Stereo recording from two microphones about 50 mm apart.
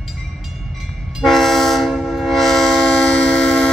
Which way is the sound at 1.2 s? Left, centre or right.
Centre.